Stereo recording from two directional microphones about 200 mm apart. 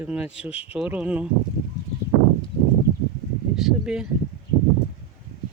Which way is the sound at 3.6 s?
Centre (ahead or behind).